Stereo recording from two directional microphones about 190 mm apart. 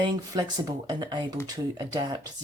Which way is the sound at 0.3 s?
20° right (ahead or behind).